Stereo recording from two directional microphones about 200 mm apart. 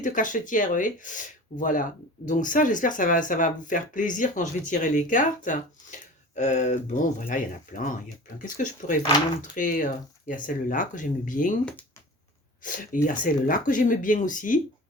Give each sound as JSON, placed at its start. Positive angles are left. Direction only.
{"t": 0.0, "sound": "speech", "side_deg": 40}
{"t": 12.6, "sound": "speech", "side_deg": 40}